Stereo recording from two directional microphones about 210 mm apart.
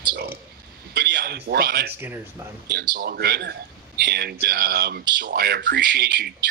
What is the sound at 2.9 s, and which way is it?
Speech, 50° right (ahead or behind).